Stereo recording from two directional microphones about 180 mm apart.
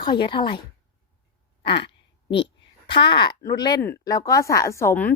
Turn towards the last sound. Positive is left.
turn(degrees=10)  # may be behind; listen again after turning